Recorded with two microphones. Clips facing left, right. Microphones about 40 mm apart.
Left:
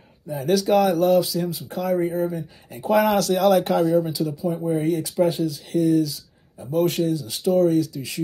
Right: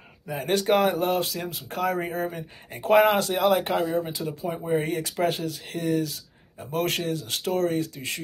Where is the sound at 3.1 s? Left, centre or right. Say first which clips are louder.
Left 4 dB; right.